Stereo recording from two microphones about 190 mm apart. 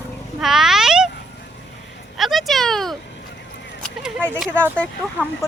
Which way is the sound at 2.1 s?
Centre (ahead or behind).